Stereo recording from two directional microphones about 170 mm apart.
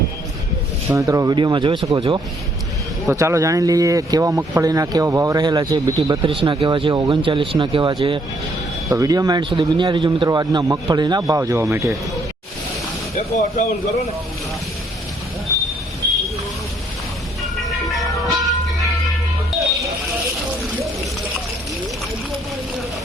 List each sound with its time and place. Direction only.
0.9 s a man's voice: 20° right (ahead or behind)
13.1 s speech: 45° left (ahead or behind)
16.0 s vehicle: 70° right (ahead or behind)
17.7 s vehicle: centre (ahead or behind)